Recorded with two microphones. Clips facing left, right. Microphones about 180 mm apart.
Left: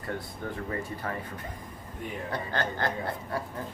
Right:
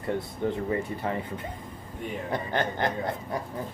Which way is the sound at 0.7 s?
20° right (ahead or behind).